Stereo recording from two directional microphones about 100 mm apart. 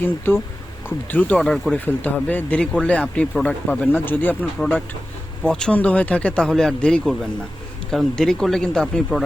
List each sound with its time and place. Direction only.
0.0 s speech: 20° left (ahead or behind)
1.4 s speech: 5° left (ahead or behind)
1.8 s speech: 20° left (ahead or behind)
5.5 s speech: 10° left (ahead or behind)